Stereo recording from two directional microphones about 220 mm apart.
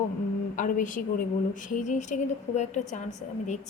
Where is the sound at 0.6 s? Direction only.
35° left (ahead or behind).